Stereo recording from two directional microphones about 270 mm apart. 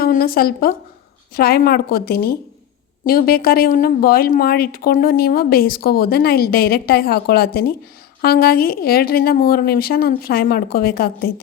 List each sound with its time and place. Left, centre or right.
0.0 s speech: left